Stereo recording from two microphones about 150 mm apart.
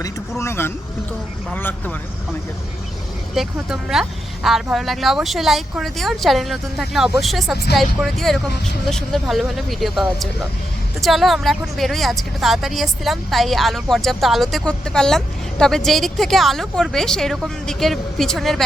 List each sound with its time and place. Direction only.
0.0 s speech: 15° left (ahead or behind)
3.3 s speech: centre (ahead or behind)